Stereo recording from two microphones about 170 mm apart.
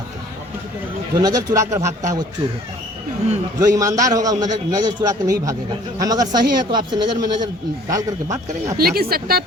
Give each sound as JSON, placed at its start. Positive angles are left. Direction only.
{"t": 1.1, "sound": "a man's voice", "side_deg": -20}
{"t": 3.6, "sound": "a man's voice", "side_deg": -20}
{"t": 8.8, "sound": "speech", "side_deg": -65}